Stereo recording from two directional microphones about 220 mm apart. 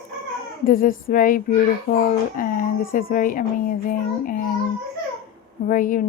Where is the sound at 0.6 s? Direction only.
40° left (ahead or behind).